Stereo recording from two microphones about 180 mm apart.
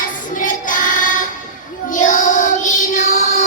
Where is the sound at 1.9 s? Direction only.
45° left (ahead or behind).